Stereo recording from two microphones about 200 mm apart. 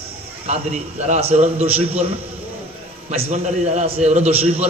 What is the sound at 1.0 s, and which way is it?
A man's voice, 35° right (ahead or behind).